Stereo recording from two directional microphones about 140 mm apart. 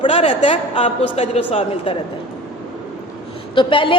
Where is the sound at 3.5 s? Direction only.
35° left (ahead or behind).